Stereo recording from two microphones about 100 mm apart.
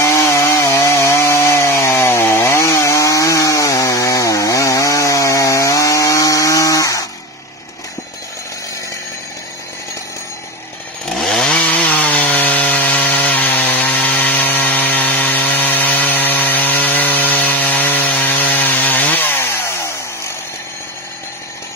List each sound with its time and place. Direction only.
0.0 s chainsaw: 30° left (ahead or behind)
11.1 s chainsaw: 5° left (ahead or behind); by 19.9 s 25° left (ahead or behind)